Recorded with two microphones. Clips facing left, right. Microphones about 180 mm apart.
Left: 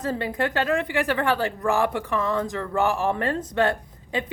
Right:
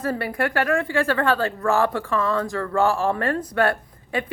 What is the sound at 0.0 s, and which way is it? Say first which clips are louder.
A woman's voice: right 1 dB; 20° left (ahead or behind).